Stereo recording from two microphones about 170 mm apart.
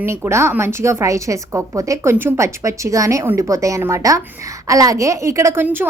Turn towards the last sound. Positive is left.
turn(degrees=-10)  # may be behind; listen again after turning